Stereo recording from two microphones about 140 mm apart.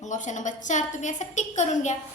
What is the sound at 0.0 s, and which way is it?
A woman's voice, 60° left (ahead or behind).